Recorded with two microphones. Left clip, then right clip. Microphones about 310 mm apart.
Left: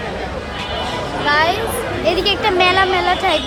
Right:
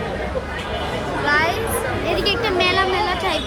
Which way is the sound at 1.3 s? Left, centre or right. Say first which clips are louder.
Left 4 dB; centre.